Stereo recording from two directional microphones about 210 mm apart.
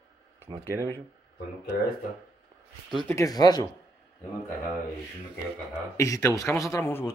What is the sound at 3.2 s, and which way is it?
Speech, 20° left (ahead or behind).